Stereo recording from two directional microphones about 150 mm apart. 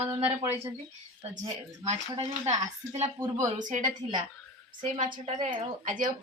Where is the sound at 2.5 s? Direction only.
25° right (ahead or behind).